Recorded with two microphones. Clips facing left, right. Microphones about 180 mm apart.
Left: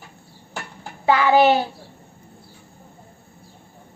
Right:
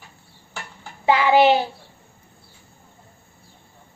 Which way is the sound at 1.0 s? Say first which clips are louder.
Even; 15° right (ahead or behind).